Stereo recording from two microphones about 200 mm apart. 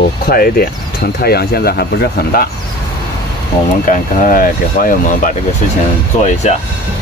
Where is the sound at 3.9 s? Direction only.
45° left (ahead or behind).